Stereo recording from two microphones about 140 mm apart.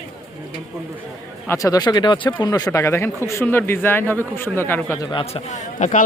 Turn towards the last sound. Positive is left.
turn(degrees=60)  # may be behind; listen again after turning